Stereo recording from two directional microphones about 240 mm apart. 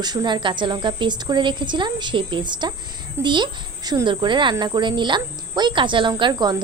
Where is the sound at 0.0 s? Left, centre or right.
Centre.